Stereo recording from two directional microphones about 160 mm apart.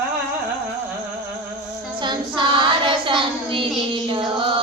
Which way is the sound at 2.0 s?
30° right (ahead or behind).